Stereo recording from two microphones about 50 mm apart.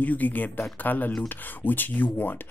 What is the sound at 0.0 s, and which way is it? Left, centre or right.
Speech, left.